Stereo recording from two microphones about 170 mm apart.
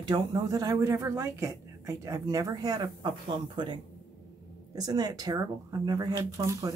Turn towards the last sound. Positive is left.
turn(degrees=-20)  # may be behind; listen again after turning